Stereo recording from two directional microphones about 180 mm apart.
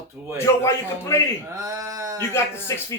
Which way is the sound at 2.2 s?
15° left (ahead or behind).